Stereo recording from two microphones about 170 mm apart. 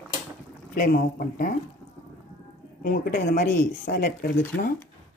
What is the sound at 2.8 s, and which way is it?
Speech, 55° left (ahead or behind).